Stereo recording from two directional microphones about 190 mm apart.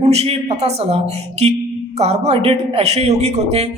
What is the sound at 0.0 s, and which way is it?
A man's voice, 35° right (ahead or behind).